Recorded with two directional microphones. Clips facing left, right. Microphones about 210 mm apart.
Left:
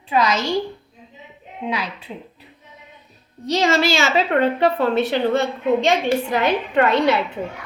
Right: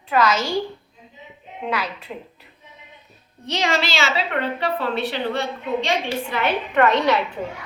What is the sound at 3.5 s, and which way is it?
A woman's voice, 50° left (ahead or behind).